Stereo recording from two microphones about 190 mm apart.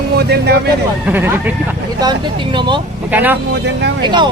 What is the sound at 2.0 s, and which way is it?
Speech, 25° right (ahead or behind).